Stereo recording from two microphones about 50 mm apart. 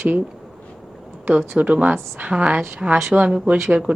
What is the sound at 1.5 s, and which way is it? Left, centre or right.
A woman's voice, right.